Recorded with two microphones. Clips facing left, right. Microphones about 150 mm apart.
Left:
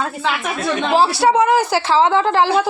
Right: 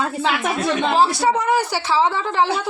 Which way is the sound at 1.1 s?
75° left (ahead or behind).